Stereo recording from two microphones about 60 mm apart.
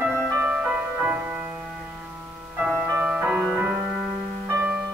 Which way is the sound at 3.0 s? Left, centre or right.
Centre.